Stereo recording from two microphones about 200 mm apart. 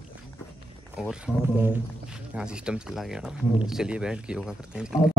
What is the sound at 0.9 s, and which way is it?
Speech, 5° right (ahead or behind).